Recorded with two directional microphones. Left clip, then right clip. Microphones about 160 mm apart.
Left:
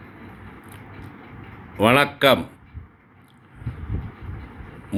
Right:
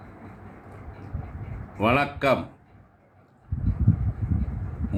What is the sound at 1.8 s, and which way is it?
Speech, 40° left (ahead or behind).